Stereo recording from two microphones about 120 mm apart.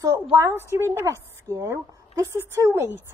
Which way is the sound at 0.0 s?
30° right (ahead or behind).